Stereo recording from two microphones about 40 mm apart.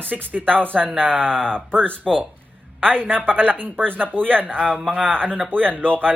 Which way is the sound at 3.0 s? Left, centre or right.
Right.